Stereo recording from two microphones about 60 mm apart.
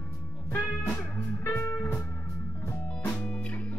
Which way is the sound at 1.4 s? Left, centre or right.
Left.